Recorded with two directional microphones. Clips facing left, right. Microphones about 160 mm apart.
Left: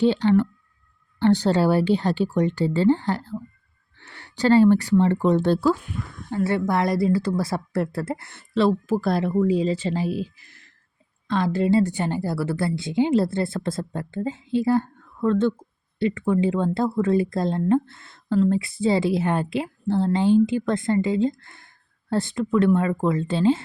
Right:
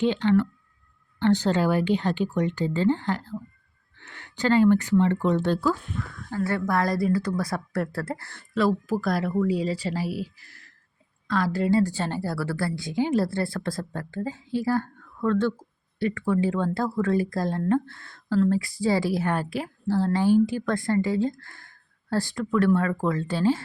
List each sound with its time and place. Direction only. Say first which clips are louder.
0.0 s a woman's voice: left 3 dB; 35° left (ahead or behind)